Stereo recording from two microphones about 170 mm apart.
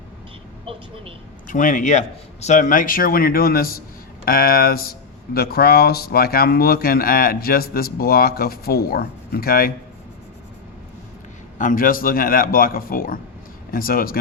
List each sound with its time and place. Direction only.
0.6 s speech: 35° right (ahead or behind)
1.5 s speech: 50° left (ahead or behind)
11.5 s speech: 50° left (ahead or behind)